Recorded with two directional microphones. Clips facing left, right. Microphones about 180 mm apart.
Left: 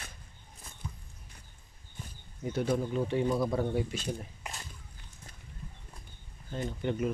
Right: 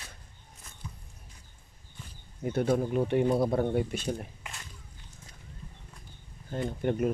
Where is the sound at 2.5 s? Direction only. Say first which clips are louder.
Right 3 dB; 55° right (ahead or behind).